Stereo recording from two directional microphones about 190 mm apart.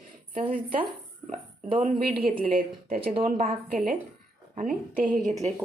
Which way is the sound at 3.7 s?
45° right (ahead or behind).